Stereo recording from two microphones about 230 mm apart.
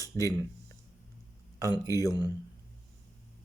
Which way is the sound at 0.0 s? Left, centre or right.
Centre.